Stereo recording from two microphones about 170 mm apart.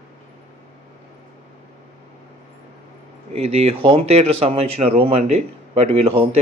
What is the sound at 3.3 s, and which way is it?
Speech, 35° right (ahead or behind).